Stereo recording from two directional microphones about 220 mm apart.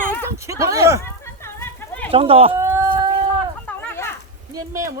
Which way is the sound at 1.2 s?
10° left (ahead or behind).